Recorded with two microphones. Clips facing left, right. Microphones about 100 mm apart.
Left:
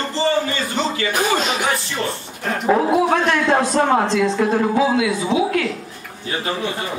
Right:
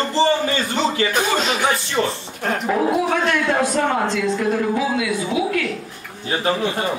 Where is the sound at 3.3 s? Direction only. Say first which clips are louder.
Left 2 dB; 30° left (ahead or behind).